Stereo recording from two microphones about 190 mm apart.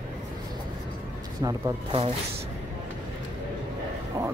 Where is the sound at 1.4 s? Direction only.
20° right (ahead or behind).